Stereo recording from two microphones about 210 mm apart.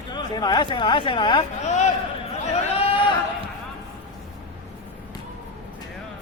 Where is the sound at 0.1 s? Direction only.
20° left (ahead or behind).